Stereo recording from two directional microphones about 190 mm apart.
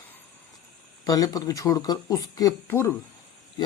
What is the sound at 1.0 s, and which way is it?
Speech, 20° left (ahead or behind).